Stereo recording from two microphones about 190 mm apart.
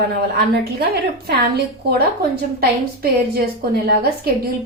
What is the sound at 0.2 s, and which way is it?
A woman's voice, 60° right (ahead or behind).